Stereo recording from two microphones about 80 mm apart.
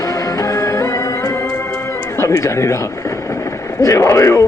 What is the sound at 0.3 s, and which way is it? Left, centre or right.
Music, left.